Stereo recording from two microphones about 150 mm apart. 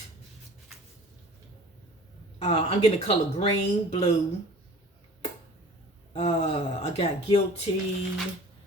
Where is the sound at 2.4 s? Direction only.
45° left (ahead or behind).